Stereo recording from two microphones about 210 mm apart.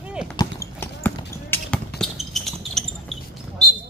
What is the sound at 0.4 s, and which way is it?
Basketball bounce, 15° left (ahead or behind).